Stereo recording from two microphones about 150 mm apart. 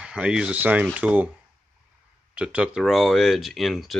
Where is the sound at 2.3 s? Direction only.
5° right (ahead or behind).